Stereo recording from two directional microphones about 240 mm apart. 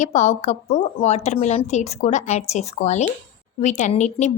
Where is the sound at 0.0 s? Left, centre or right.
Left.